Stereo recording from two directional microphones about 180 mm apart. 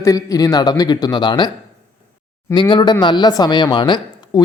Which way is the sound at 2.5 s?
25° left (ahead or behind).